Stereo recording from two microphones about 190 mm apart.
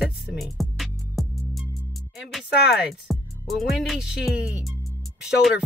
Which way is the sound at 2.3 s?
Centre (ahead or behind).